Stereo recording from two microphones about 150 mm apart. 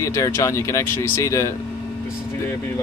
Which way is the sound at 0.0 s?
20° left (ahead or behind).